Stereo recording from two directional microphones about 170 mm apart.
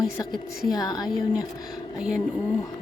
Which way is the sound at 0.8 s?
25° left (ahead or behind).